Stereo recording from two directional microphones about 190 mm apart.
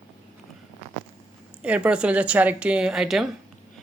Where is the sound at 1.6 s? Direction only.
5° right (ahead or behind).